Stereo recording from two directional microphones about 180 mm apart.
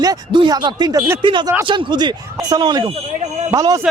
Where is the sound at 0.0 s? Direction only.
25° right (ahead or behind).